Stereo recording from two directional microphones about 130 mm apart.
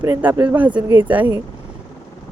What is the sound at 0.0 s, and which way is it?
Speech, 15° right (ahead or behind).